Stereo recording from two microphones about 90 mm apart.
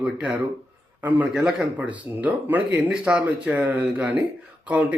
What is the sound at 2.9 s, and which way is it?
Speech, 5° right (ahead or behind).